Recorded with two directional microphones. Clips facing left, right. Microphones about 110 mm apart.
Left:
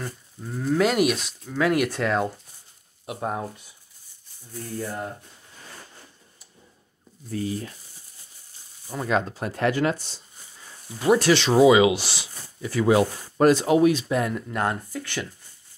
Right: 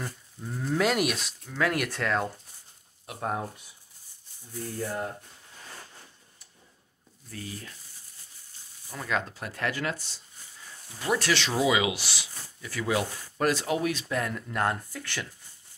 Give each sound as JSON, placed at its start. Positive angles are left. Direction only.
{"t": 0.0, "sound": "speech", "side_deg": 5}
{"t": 7.2, "sound": "speech", "side_deg": 25}
{"t": 8.8, "sound": "speech", "side_deg": 25}